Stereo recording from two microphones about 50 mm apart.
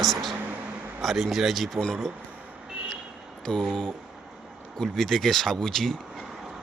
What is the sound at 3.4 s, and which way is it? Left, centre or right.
Speech, centre.